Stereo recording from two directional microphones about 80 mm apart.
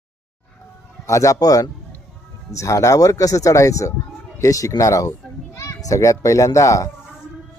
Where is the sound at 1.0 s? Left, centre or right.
Left.